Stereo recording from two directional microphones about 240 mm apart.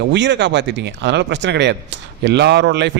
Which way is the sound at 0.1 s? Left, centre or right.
Right.